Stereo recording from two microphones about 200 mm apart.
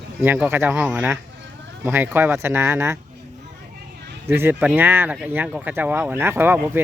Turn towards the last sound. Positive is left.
turn(degrees=-10)  # may be behind; listen again after turning